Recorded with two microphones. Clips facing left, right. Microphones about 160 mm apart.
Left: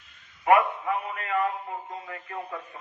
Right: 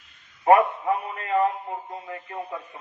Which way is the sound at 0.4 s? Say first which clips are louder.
Right 3 dB; 30° right (ahead or behind).